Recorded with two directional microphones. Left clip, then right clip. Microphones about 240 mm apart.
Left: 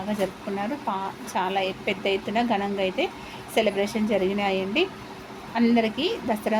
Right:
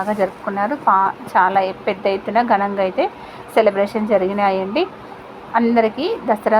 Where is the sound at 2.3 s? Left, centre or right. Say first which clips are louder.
Right 11 dB; centre.